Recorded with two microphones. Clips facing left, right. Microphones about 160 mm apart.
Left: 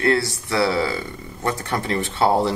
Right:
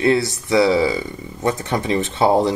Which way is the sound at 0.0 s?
20° right (ahead or behind).